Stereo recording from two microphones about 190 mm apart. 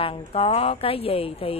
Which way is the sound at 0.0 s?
30° left (ahead or behind).